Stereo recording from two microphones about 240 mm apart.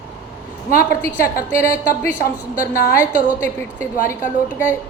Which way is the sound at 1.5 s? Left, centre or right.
Left.